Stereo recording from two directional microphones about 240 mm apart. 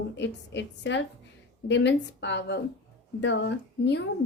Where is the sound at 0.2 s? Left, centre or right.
Left.